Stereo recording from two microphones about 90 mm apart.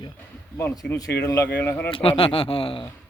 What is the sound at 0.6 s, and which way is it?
Speech, 20° left (ahead or behind).